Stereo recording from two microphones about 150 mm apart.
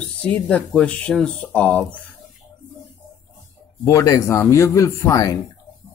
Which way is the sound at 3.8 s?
20° left (ahead or behind).